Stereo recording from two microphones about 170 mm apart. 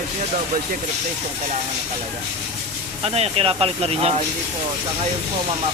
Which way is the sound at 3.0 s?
35° right (ahead or behind).